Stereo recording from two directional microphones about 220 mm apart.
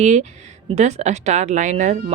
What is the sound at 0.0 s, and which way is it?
Speech, 30° right (ahead or behind).